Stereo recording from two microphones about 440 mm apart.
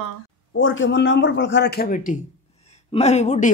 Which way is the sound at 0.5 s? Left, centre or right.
Left.